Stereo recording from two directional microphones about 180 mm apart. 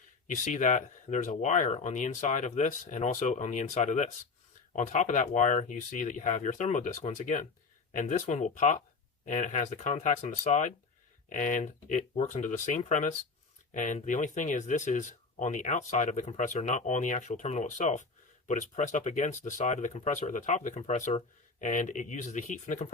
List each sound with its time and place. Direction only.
0.3 s speech: 45° left (ahead or behind)